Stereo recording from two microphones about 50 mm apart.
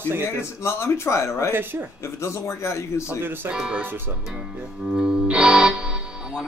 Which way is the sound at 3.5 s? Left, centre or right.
Right.